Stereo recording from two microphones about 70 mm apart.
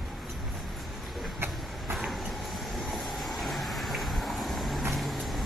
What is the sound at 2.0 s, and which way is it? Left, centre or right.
Vehicle, centre.